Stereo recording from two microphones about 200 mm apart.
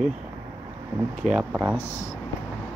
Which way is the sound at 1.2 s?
5° right (ahead or behind).